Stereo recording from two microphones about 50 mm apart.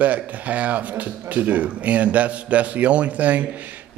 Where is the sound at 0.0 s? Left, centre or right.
Right.